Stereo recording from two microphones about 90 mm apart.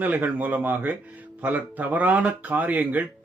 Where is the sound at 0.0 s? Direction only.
20° right (ahead or behind).